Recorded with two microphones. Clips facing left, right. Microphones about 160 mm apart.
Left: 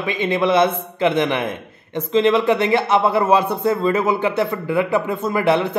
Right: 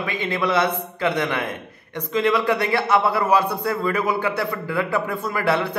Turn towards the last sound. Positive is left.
turn(degrees=20)  # may be behind; listen again after turning